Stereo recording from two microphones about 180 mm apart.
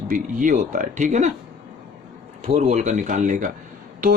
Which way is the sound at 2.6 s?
40° right (ahead or behind).